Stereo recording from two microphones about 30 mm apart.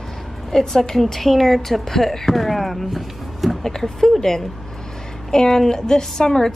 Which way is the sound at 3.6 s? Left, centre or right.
Centre.